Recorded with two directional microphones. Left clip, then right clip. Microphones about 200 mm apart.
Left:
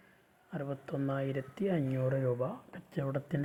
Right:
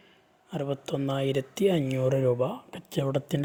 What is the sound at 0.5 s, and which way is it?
Speech, 50° right (ahead or behind).